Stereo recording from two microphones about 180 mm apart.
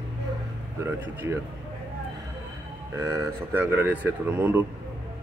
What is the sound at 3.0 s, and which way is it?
Speech, 15° right (ahead or behind).